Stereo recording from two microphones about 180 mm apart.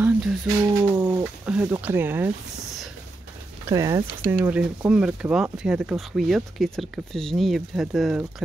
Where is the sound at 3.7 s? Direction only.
20° right (ahead or behind).